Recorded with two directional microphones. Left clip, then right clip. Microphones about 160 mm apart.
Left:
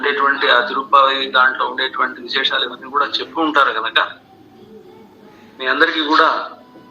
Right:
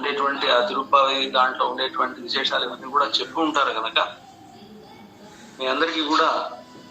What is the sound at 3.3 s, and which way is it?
Speech, 45° left (ahead or behind).